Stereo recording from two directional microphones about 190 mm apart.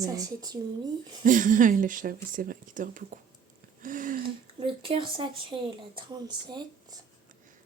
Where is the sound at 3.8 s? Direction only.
45° right (ahead or behind).